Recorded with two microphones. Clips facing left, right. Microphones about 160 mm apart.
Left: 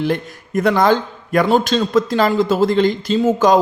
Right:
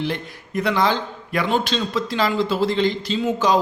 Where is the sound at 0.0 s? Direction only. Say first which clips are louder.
Left 6 dB; 45° left (ahead or behind).